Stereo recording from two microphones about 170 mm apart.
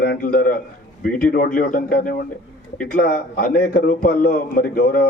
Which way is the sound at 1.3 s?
60° left (ahead or behind).